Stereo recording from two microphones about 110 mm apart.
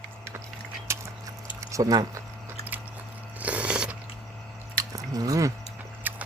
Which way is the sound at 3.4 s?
10° right (ahead or behind).